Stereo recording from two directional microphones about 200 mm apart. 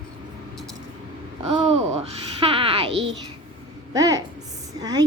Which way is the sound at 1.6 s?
30° right (ahead or behind).